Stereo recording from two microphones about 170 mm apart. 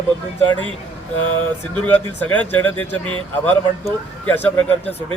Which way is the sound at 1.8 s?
10° left (ahead or behind).